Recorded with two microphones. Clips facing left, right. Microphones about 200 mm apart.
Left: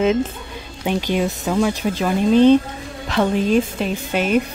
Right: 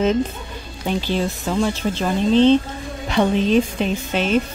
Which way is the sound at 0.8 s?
15° left (ahead or behind).